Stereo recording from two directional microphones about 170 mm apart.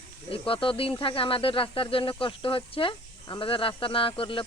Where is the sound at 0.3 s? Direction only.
30° left (ahead or behind).